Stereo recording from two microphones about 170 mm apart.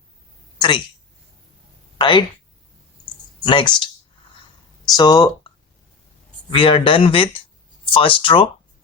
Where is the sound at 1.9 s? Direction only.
25° left (ahead or behind).